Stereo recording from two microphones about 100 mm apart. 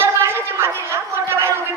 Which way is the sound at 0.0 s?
25° right (ahead or behind).